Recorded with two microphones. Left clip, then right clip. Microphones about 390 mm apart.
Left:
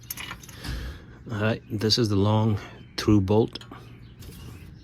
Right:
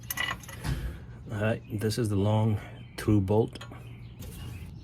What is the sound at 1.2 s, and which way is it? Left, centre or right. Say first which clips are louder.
Speech: left 3 dB; centre.